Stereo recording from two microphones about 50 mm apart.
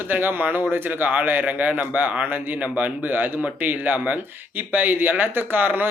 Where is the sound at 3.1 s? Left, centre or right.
Right.